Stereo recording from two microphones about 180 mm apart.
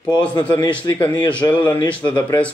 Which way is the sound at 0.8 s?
25° left (ahead or behind).